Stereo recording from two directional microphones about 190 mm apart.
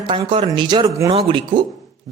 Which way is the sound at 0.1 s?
25° right (ahead or behind).